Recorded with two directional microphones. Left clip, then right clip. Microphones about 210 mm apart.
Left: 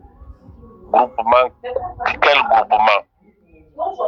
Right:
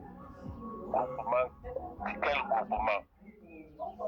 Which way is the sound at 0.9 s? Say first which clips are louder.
Left 17 dB; 45° left (ahead or behind).